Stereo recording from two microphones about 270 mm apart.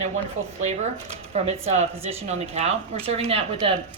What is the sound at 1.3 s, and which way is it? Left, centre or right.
Speech, right.